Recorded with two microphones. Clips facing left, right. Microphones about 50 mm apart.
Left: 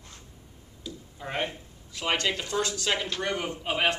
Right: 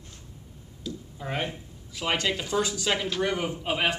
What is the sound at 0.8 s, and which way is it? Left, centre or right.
Speech, centre.